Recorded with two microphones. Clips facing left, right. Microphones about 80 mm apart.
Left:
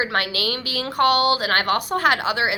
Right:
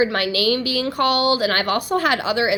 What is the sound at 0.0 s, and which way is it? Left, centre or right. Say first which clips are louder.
A woman's voice: right 4 dB; left.